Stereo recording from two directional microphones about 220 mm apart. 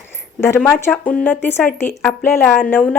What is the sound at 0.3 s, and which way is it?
A woman's voice, 10° left (ahead or behind).